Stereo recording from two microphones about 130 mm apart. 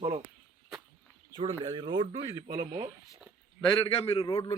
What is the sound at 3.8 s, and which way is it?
Speech, 45° left (ahead or behind).